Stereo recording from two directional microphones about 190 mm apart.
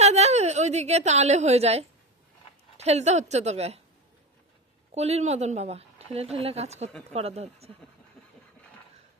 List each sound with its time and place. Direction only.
0.0 s a woman's voice: 35° right (ahead or behind)
4.9 s speech: 35° right (ahead or behind)